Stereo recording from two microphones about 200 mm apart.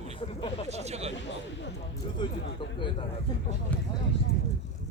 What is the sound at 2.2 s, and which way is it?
Speech, 25° left (ahead or behind).